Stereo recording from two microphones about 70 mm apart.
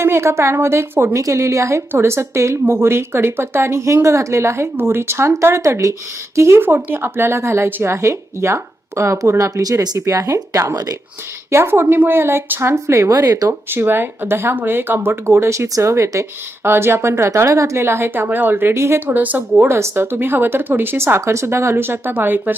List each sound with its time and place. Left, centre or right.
0.0 s a woman's voice: right
9.6 s speech: right
10.2 s a woman's voice: right
11.5 s speech: right
13.5 s speech: right
16.6 s speech: right
18.9 s speech: right
19.6 s speech: right